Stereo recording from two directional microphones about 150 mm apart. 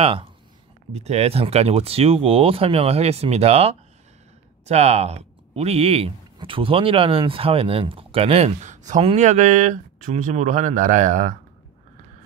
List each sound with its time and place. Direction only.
0.0 s speech: 35° right (ahead or behind); by 11.3 s 55° right (ahead or behind)